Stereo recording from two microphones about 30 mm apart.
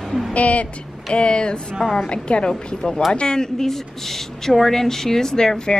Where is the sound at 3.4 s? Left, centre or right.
Centre.